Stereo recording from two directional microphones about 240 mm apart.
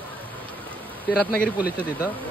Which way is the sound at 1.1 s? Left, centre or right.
Centre.